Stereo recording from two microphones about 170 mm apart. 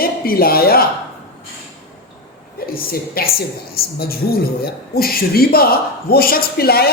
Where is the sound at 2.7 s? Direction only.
60° left (ahead or behind).